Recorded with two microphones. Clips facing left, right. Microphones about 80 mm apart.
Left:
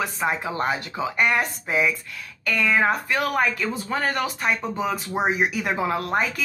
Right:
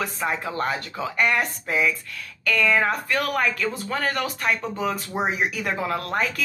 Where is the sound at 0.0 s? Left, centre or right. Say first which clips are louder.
Left 1 dB; centre.